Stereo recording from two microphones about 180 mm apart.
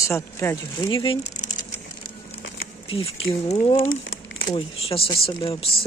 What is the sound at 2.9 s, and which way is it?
Speech, 30° left (ahead or behind).